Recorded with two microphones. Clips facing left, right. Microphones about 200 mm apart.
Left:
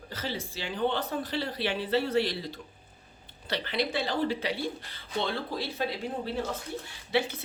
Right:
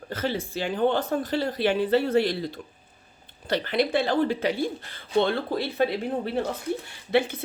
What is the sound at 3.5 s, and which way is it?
Speech, 50° right (ahead or behind).